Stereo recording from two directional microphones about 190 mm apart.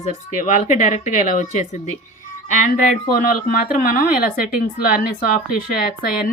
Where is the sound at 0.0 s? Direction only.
40° left (ahead or behind).